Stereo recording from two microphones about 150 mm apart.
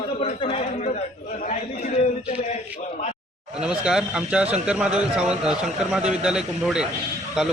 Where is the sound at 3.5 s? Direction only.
5° right (ahead or behind).